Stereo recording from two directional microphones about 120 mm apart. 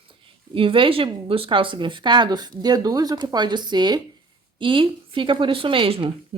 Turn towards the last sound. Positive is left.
turn(degrees=-45)  # may be behind; listen again after turning